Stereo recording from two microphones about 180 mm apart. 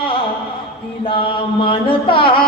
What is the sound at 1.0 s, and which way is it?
Chant, 30° left (ahead or behind).